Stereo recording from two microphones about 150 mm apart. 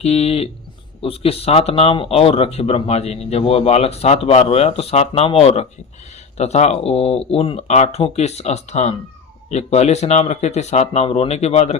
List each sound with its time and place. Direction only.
0.0 s speech: 45° left (ahead or behind)